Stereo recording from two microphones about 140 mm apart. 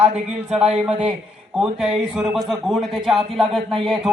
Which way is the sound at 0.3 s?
5° right (ahead or behind).